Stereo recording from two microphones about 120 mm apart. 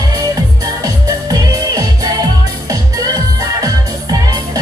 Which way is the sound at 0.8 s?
30° right (ahead or behind).